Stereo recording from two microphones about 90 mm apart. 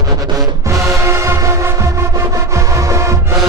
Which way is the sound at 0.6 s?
35° right (ahead or behind).